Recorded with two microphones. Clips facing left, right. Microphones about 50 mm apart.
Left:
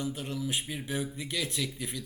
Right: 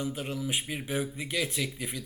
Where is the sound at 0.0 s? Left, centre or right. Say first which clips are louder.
Right 1 dB; centre.